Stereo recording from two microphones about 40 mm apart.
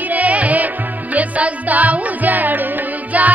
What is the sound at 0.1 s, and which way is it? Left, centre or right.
Music, right.